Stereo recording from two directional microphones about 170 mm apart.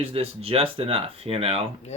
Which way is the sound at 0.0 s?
35° right (ahead or behind).